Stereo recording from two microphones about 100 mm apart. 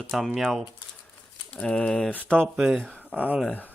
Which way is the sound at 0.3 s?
Centre (ahead or behind).